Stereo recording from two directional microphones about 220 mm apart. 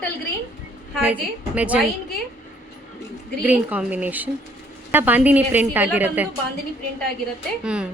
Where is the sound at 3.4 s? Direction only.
5° right (ahead or behind).